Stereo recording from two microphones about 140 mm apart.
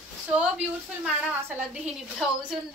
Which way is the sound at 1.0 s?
5° right (ahead or behind).